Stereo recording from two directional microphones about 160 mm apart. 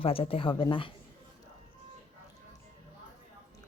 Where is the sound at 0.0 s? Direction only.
35° left (ahead or behind).